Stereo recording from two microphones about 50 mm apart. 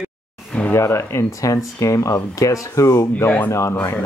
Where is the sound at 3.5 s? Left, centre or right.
Left.